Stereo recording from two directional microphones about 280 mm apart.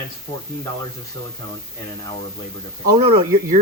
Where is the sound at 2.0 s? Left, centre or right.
Left.